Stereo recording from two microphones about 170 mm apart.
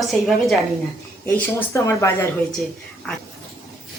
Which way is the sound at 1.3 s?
15° left (ahead or behind).